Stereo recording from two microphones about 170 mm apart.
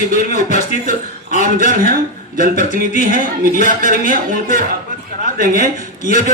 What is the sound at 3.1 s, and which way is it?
A man's voice, 55° right (ahead or behind).